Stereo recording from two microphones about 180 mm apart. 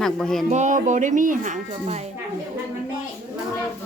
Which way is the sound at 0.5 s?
40° right (ahead or behind).